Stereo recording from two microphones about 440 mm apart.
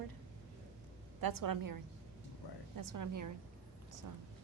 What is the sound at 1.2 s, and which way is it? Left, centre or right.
Speech, right.